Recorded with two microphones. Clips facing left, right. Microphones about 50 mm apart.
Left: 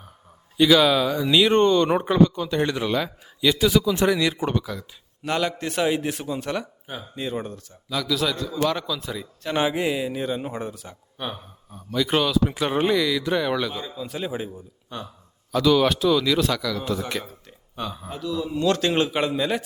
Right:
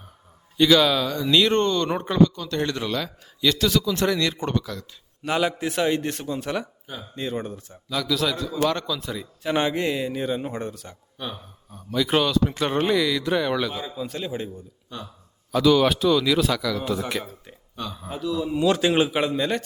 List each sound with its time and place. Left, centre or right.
0.5 s speech: centre
5.2 s speech: centre
9.6 s speech: centre
14.1 s speech: centre
17.7 s speech: centre
18.0 s speech: centre